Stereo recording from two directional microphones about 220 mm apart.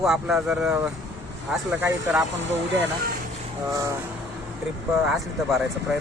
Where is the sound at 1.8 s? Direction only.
5° right (ahead or behind).